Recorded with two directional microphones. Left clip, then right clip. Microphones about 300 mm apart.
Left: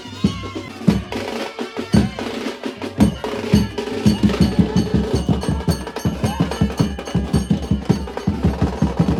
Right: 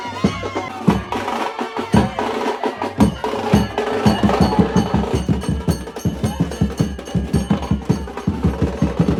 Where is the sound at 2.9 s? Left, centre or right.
Centre.